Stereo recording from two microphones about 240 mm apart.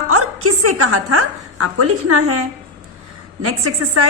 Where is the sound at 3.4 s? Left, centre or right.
Right.